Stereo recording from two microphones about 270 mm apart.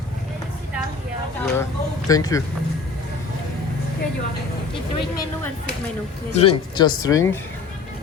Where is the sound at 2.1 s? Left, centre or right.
Centre.